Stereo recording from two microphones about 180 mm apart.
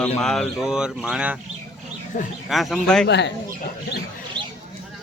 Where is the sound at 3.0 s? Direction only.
75° left (ahead or behind).